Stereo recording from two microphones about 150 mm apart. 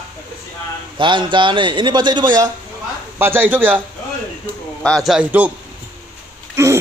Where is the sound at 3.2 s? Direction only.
15° right (ahead or behind).